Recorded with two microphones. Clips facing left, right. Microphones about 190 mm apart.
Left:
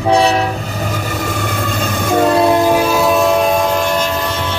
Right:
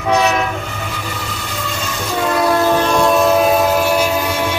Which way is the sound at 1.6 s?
50° left (ahead or behind).